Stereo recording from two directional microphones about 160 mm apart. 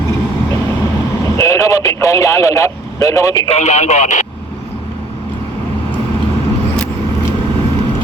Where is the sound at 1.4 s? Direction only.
20° left (ahead or behind).